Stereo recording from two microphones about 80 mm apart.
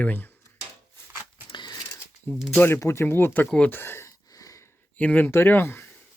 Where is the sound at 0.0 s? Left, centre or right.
Left.